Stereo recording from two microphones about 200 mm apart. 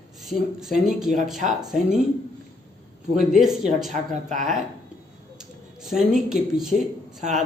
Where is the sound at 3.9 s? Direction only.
40° right (ahead or behind).